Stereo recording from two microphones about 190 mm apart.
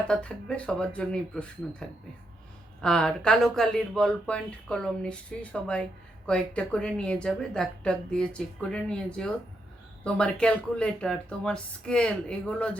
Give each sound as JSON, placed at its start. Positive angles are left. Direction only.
{"t": 0.1, "sound": "speech", "side_deg": 5}
{"t": 2.8, "sound": "speech", "side_deg": 5}